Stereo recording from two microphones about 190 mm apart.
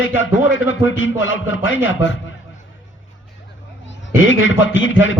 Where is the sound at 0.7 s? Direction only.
85° left.